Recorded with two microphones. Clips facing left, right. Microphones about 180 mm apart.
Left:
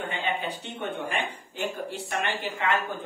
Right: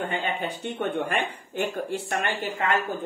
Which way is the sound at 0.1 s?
45° right (ahead or behind).